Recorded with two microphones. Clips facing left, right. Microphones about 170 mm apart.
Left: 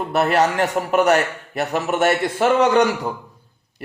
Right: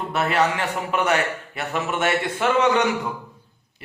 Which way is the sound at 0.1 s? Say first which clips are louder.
Left 4 dB; 40° left (ahead or behind).